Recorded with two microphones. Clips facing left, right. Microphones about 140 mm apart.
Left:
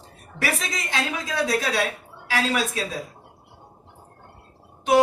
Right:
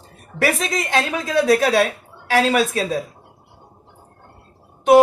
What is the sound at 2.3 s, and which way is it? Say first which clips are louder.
Speech: right 7 dB; 60° right (ahead or behind).